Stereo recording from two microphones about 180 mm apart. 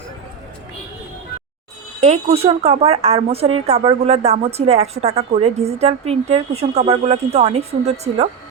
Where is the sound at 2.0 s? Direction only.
35° right (ahead or behind).